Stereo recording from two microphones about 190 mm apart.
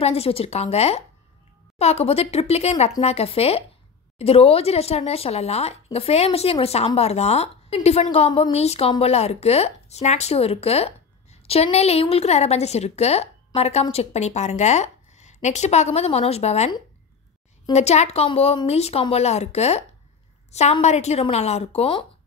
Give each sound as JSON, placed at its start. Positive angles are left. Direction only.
{"t": 0.0, "sound": "speech", "side_deg": 30}
{"t": 17.7, "sound": "speech", "side_deg": 35}